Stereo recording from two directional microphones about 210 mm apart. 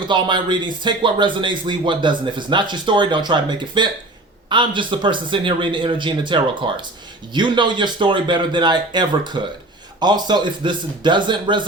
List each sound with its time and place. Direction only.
0.1 s a man's voice: 20° right (ahead or behind)